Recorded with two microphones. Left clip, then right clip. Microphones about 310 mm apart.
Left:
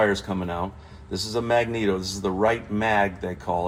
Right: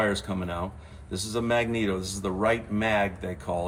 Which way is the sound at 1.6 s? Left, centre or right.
Left.